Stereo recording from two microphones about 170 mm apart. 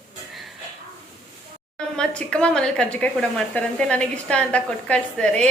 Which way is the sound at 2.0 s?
5° left (ahead or behind).